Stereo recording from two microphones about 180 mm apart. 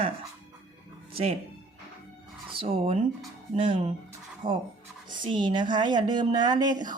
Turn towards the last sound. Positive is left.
turn(degrees=-25)  # may be behind; listen again after turning